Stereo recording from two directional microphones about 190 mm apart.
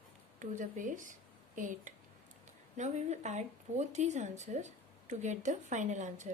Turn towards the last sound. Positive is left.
turn(degrees=-40)  # may be behind; listen again after turning